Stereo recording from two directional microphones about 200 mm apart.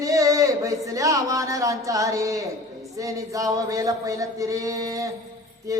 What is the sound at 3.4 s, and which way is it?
Speech, 15° right (ahead or behind).